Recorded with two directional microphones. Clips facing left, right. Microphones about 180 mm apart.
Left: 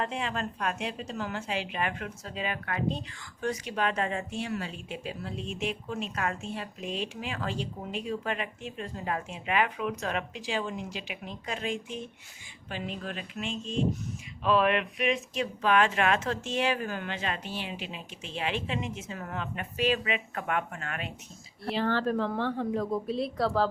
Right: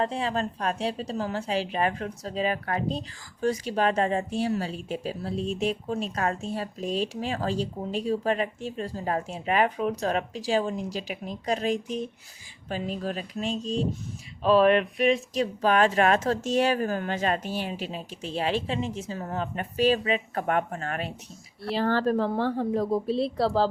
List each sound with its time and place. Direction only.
0.0 s speech: 35° right (ahead or behind)